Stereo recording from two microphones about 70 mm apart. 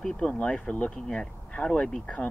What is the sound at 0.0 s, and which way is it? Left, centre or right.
Speech, centre.